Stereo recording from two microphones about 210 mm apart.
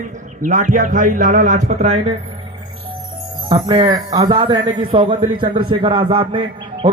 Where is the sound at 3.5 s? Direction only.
20° right (ahead or behind).